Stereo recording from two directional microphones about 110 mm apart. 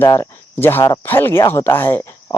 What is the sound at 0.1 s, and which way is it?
Speech, 25° left (ahead or behind).